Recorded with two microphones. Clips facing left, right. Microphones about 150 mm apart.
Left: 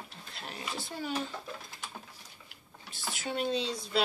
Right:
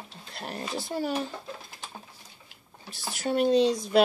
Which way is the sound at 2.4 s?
35° right (ahead or behind).